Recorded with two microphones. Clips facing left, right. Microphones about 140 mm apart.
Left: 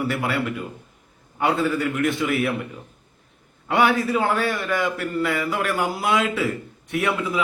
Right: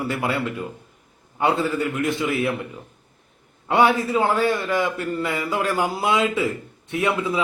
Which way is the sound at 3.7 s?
25° right (ahead or behind).